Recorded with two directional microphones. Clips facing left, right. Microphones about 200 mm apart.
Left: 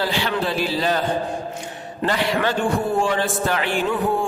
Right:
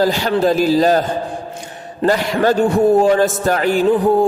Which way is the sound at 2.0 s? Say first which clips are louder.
Right 6 dB; 40° right (ahead or behind).